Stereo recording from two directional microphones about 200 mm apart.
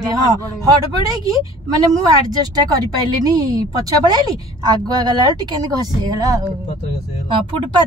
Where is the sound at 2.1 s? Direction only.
20° right (ahead or behind).